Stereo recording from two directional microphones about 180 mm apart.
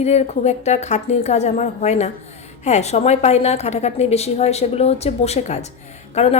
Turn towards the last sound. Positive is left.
turn(degrees=40)  # may be behind; listen again after turning